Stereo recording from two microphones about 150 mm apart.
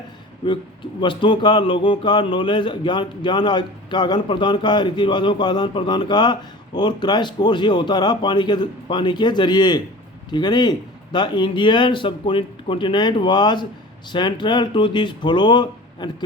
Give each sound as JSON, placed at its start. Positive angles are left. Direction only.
{"t": 0.4, "sound": "speech", "side_deg": 30}